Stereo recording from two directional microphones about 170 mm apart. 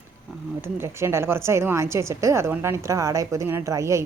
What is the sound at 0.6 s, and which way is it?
Speech, 15° right (ahead or behind).